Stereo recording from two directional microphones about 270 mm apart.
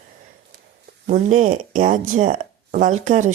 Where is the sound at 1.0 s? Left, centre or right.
Right.